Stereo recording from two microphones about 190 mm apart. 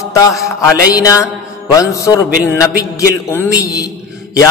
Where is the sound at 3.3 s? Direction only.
15° left (ahead or behind).